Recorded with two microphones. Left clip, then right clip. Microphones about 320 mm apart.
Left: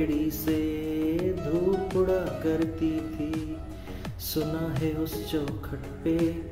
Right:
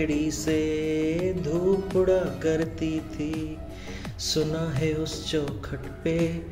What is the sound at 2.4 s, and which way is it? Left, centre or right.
Music, centre.